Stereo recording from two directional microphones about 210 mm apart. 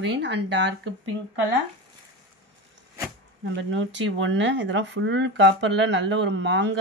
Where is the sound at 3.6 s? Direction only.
65° right (ahead or behind).